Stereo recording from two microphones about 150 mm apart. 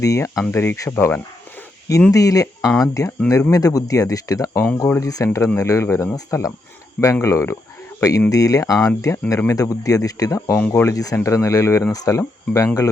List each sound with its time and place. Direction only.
0.0 s speech: 20° left (ahead or behind)